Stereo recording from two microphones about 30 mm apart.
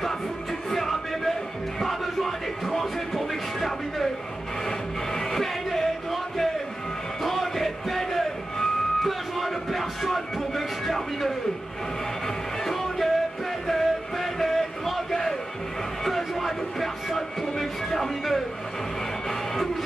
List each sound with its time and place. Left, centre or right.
0.0 s music: centre
16.0 s a sound: centre
19.2 s music: centre